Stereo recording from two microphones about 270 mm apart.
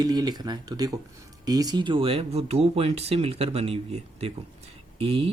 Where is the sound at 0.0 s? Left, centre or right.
Centre.